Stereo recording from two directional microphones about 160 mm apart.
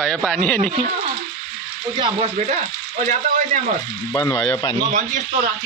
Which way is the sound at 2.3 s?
50° right (ahead or behind).